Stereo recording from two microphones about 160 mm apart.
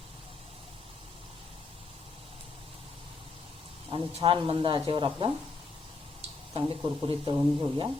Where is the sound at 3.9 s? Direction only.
30° right (ahead or behind).